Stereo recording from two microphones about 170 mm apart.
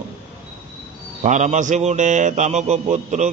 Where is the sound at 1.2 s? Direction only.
45° right (ahead or behind).